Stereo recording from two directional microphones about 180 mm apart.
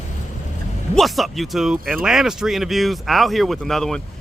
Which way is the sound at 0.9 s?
Centre (ahead or behind).